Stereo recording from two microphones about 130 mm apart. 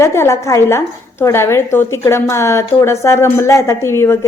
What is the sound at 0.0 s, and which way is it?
A woman's voice, 20° left (ahead or behind).